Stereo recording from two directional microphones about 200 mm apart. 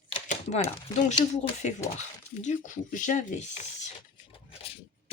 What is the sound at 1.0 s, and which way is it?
Speech, 35° left (ahead or behind).